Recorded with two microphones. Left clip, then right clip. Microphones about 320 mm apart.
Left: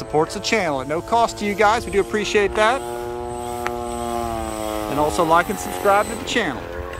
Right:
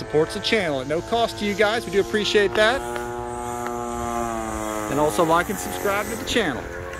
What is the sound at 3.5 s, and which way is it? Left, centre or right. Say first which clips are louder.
Vehicle: left 3 dB; left.